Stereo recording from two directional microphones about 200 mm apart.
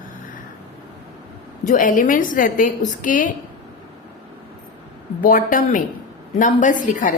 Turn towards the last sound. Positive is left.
turn(degrees=40)  # may be behind; listen again after turning